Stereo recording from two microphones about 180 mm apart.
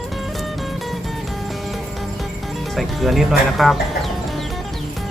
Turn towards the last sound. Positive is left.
turn(degrees=0)  # may be behind; listen again after turning